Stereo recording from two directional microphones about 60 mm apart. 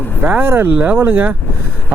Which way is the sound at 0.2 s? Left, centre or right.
Right.